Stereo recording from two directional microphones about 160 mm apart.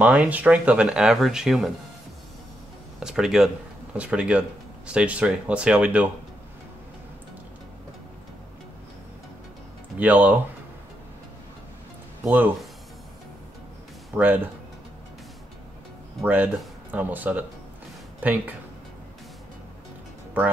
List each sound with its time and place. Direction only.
0.0 s speech: 10° right (ahead or behind)
3.0 s speech: 5° right (ahead or behind)
9.9 s speech: 10° right (ahead or behind)
12.3 s speech: 10° right (ahead or behind)
14.1 s speech: 10° right (ahead or behind)
16.2 s speech: 10° right (ahead or behind)